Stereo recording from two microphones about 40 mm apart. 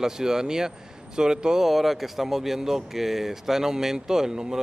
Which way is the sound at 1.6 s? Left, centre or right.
Centre.